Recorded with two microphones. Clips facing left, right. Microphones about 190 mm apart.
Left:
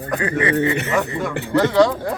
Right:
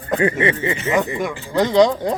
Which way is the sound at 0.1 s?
25° right (ahead or behind).